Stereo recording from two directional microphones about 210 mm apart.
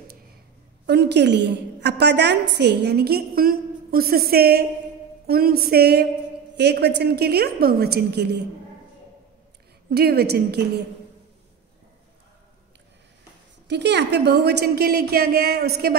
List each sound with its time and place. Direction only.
0.8 s a woman's voice: 50° right (ahead or behind)
9.8 s a woman's voice: 50° right (ahead or behind)
13.7 s a woman's voice: 55° right (ahead or behind)